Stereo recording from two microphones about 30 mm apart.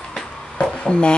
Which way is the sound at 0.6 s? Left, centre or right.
Left.